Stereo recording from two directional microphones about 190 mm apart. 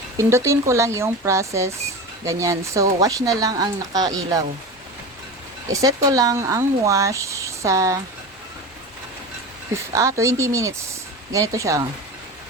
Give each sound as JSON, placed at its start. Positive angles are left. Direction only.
{"t": 0.2, "sound": "speech", "side_deg": -15}
{"t": 5.7, "sound": "speech", "side_deg": -20}
{"t": 9.7, "sound": "speech", "side_deg": -15}